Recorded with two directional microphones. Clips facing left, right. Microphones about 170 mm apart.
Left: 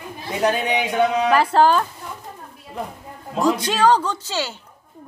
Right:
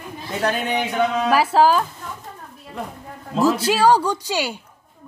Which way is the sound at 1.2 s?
5° right (ahead or behind).